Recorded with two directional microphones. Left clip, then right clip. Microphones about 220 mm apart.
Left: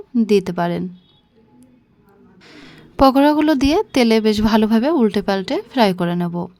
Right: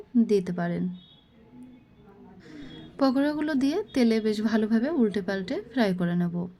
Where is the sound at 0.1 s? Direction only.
35° left (ahead or behind).